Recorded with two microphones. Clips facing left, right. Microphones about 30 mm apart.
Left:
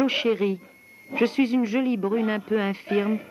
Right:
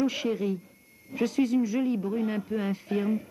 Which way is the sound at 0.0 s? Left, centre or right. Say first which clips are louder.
Left 5 dB; left.